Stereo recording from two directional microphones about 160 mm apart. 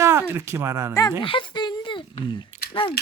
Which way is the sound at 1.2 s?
30° left (ahead or behind).